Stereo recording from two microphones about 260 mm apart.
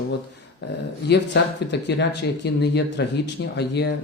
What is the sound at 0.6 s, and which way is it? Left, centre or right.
Speech, left.